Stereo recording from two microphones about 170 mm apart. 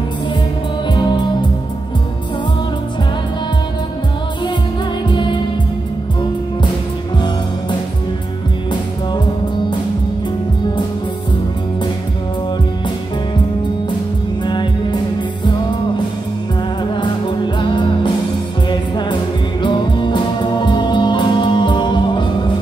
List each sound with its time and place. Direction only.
0.9 s music: 25° left (ahead or behind)
14.4 s music: 25° left (ahead or behind)
17.6 s music: 25° left (ahead or behind)